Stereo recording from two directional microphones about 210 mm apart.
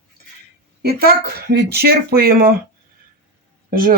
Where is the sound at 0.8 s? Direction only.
45° right (ahead or behind).